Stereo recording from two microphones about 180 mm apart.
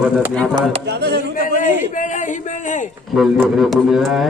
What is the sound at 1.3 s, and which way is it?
A man's voice, 50° left (ahead or behind).